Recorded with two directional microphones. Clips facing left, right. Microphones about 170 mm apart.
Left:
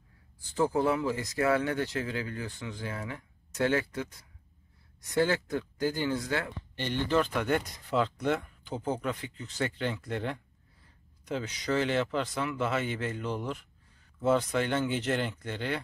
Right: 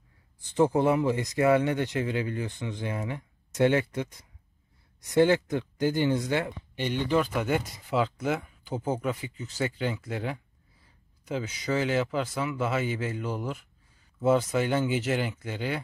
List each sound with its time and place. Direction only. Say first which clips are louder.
0.4 s speech: right 4 dB; 20° right (ahead or behind)